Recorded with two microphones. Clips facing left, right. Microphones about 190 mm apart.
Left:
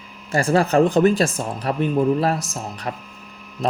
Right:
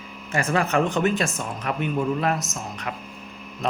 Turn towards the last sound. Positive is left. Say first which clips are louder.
# left 4 dB
turn(degrees=35)  # may be behind; listen again after turning